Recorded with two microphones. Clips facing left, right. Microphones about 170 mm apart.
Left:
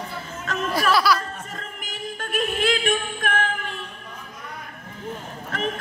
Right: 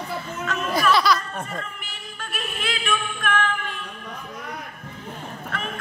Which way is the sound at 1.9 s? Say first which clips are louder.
Left 6 dB; 50° left (ahead or behind).